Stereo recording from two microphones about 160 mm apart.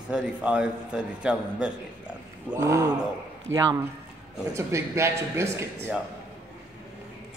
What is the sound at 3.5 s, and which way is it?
A man's voice, 15° right (ahead or behind).